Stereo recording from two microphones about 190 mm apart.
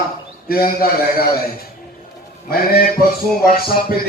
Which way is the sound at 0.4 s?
50° left (ahead or behind).